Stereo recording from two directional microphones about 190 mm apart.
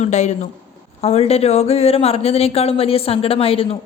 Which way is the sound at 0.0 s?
40° left (ahead or behind).